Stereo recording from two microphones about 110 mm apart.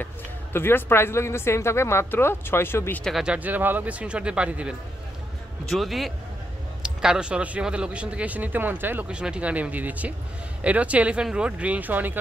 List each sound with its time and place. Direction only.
0.0 s a woman's voice: 20° left (ahead or behind)
3.0 s a man's voice: centre (ahead or behind)
3.3 s speech: 15° right (ahead or behind)
5.7 s a man's voice: centre (ahead or behind); by 12.2 s 15° right (ahead or behind)